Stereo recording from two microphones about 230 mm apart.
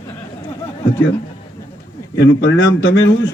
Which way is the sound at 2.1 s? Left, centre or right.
Left.